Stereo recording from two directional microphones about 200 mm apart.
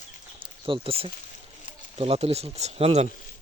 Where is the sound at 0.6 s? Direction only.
25° right (ahead or behind).